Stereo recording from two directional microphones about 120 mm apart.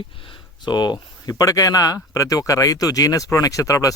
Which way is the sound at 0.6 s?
35° left (ahead or behind).